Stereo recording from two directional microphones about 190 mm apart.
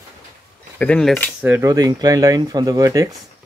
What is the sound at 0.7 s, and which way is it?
Speech, 5° left (ahead or behind).